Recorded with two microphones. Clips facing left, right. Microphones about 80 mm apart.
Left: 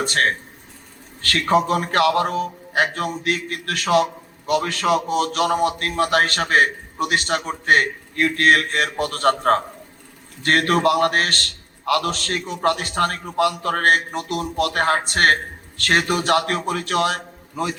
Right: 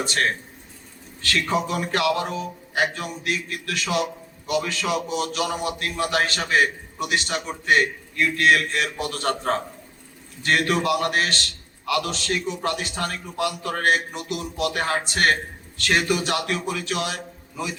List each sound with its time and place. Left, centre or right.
0.0 s a man's voice: left